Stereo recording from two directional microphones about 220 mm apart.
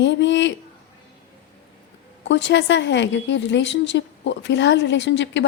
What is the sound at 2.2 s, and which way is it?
A woman's voice, 55° left (ahead or behind).